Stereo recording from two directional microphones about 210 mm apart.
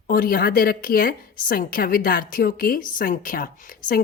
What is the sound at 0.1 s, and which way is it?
A woman's voice, 45° left (ahead or behind).